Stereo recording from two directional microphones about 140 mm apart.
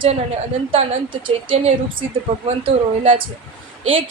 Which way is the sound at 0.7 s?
40° right (ahead or behind).